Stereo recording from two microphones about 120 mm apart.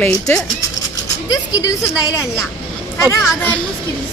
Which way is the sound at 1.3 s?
30° left (ahead or behind).